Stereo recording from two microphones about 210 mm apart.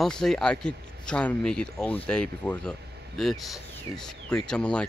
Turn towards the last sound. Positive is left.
turn(degrees=5)  # may be behind; listen again after turning